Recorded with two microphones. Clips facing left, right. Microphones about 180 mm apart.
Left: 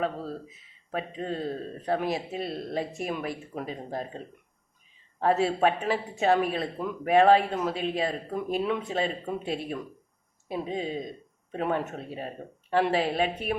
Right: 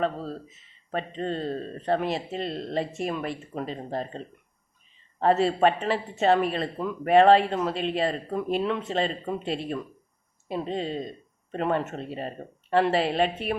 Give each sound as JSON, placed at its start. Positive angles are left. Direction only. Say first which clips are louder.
{"t": 0.0, "sound": "speech", "louder": "right 2 dB", "side_deg": 0}
{"t": 5.2, "sound": "speech", "louder": "right 2 dB", "side_deg": 0}